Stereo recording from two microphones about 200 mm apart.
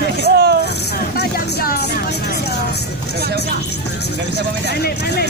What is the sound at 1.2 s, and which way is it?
Vehicle, 45° left (ahead or behind).